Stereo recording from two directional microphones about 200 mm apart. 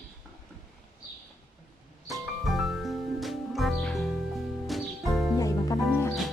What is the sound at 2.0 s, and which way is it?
Music, centre (ahead or behind).